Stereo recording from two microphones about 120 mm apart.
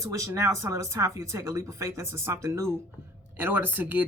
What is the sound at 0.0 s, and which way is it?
Speech, 25° right (ahead or behind).